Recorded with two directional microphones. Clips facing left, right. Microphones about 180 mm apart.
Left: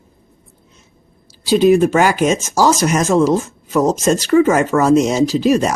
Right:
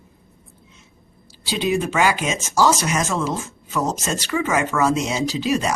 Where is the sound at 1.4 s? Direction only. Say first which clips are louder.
Left 11 dB; 45° left (ahead or behind).